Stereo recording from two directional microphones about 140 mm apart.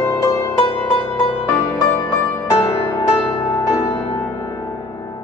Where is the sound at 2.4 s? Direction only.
20° left (ahead or behind).